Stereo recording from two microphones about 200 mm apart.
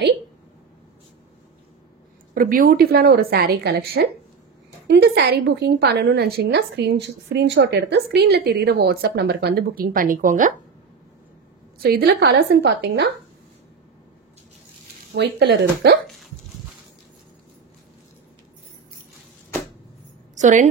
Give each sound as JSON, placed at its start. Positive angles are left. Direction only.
{"t": 2.3, "sound": "a woman's voice", "side_deg": -45}
{"t": 11.8, "sound": "a woman's voice", "side_deg": -50}
{"t": 15.1, "sound": "a woman's voice", "side_deg": -55}
{"t": 20.3, "sound": "a woman's voice", "side_deg": -35}